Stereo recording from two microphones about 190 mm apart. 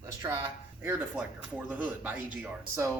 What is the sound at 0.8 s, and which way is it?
Speech, 10° right (ahead or behind).